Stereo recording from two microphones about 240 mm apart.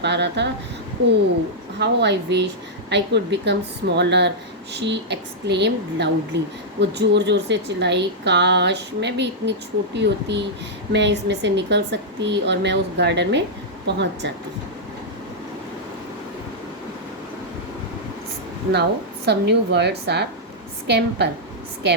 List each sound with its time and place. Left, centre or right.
0.0 s a woman's voice: right
1.8 s a woman's voice: right
18.7 s a woman's voice: right